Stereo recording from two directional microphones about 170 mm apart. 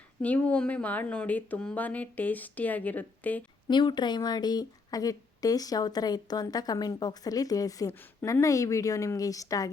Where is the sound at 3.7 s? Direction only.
25° left (ahead or behind).